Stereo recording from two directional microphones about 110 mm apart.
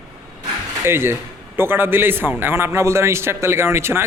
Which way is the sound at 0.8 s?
20° right (ahead or behind).